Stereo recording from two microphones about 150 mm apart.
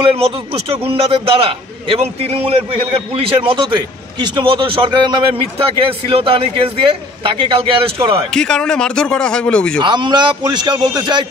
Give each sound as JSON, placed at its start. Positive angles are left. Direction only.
{"t": 0.0, "sound": "a man's voice", "side_deg": -40}
{"t": 8.3, "sound": "speech", "side_deg": 5}
{"t": 9.8, "sound": "a man's voice", "side_deg": -30}